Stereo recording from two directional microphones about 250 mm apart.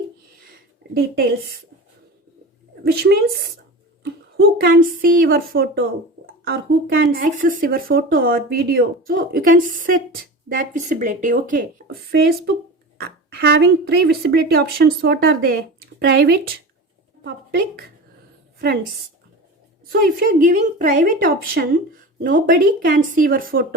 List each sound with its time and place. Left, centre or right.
2.8 s speech: right
12.1 s a woman's voice: right
19.9 s speech: right